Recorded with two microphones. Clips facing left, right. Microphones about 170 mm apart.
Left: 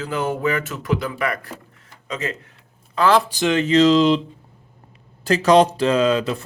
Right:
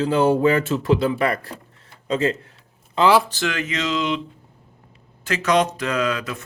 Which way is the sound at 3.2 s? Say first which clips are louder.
Left 6 dB; 20° left (ahead or behind).